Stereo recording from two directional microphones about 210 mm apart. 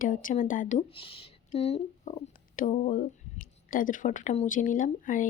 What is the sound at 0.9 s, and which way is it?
Speech, 25° left (ahead or behind).